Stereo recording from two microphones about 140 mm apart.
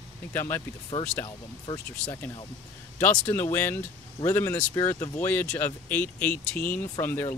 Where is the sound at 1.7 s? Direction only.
30° left (ahead or behind).